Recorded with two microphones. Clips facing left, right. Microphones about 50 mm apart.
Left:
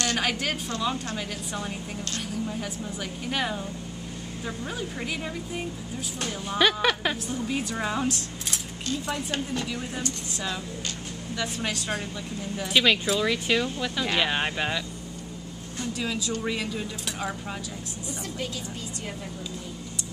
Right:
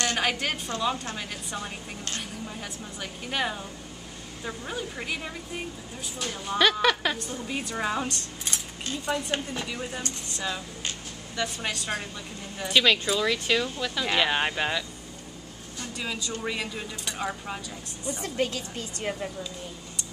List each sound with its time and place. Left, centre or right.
0.2 s speech: centre
0.7 s speech: centre
2.4 s speech: centre
9.3 s speech: centre
11.6 s speech: centre
15.9 s speech: centre
18.2 s a woman's voice: right